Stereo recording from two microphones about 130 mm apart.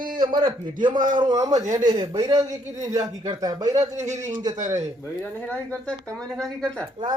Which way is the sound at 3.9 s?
65° right (ahead or behind).